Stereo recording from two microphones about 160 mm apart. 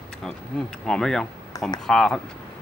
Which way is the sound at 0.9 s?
5° left (ahead or behind).